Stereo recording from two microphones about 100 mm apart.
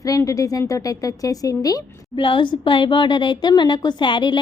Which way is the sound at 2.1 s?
55° left (ahead or behind).